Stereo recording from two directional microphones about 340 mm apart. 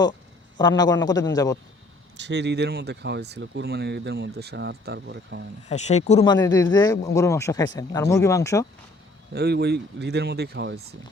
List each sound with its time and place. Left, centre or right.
0.5 s speech: centre
2.1 s speech: right
5.6 s speech: centre
9.3 s speech: right